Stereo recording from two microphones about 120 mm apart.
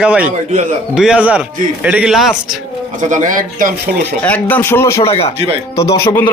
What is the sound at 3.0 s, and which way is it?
Speech, 90° right.